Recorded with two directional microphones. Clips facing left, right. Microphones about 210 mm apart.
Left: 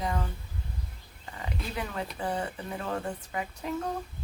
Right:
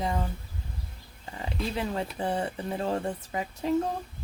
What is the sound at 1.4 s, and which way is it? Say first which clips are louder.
Speech: right 5 dB; 30° right (ahead or behind).